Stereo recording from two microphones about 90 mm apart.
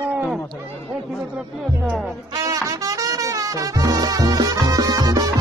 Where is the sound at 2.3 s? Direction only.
40° right (ahead or behind).